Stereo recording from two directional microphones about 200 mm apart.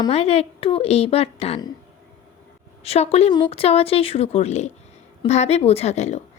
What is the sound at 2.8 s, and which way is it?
A woman's voice, 30° left (ahead or behind).